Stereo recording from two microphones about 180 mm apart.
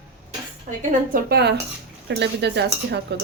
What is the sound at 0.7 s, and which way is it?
Speech, 45° right (ahead or behind).